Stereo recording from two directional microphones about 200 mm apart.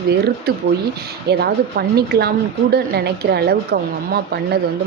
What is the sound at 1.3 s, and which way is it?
Speech, 55° right (ahead or behind).